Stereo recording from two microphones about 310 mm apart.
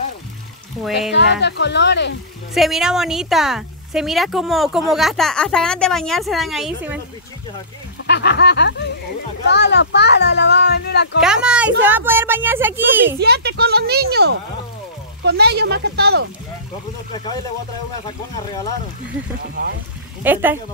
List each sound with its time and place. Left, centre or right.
1.1 s speech: left
2.5 s a woman's voice: centre
8.0 s speech: left
11.1 s a woman's voice: centre
13.2 s speech: right
17.1 s speech: centre
20.2 s a woman's voice: centre